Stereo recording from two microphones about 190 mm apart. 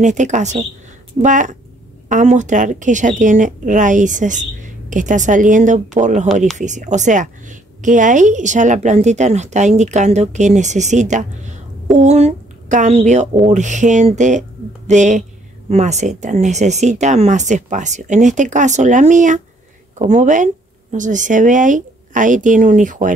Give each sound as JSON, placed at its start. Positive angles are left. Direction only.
{"t": 0.0, "sound": "a woman's voice", "side_deg": -40}